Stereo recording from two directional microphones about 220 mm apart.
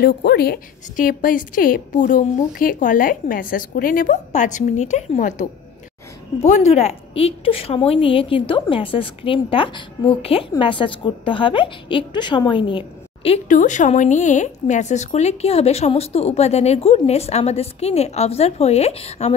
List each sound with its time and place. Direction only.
0.0 s a woman's voice: 45° left (ahead or behind); by 19.3 s 30° left (ahead or behind)